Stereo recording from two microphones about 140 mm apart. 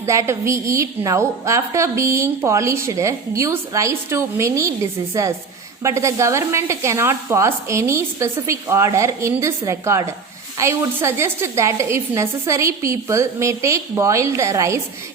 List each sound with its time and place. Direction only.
0.0 s a woman's voice: 20° right (ahead or behind)